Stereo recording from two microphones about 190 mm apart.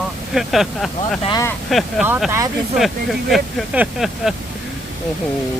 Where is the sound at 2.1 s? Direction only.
10° right (ahead or behind).